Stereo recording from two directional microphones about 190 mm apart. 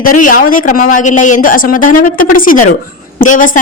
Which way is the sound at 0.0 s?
45° left (ahead or behind).